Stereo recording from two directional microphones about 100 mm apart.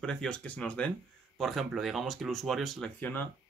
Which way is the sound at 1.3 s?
Centre (ahead or behind).